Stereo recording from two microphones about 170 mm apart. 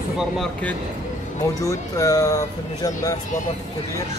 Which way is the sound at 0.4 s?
5° left (ahead or behind).